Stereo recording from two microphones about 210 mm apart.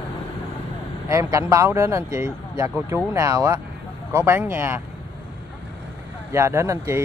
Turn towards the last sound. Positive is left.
turn(degrees=-15)  # may be behind; listen again after turning